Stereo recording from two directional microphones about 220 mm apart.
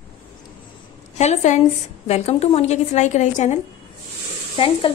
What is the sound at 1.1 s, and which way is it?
A woman's voice, 30° left (ahead or behind).